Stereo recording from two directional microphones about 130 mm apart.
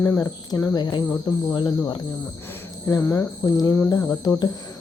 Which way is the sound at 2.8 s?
20° left (ahead or behind).